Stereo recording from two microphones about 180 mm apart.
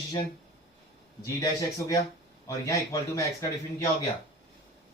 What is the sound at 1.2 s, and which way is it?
Speech, 20° left (ahead or behind).